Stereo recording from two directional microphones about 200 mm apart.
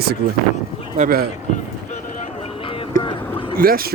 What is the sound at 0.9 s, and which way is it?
Speech, 45° right (ahead or behind).